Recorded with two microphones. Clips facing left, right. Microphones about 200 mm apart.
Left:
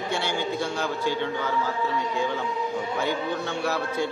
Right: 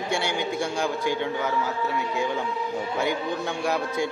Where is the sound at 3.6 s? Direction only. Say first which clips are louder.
Right 1 dB; 15° right (ahead or behind).